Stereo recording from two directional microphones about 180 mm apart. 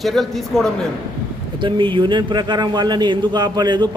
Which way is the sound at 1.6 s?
25° right (ahead or behind).